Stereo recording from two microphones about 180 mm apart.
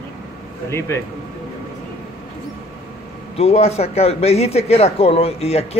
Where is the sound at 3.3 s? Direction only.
35° left (ahead or behind).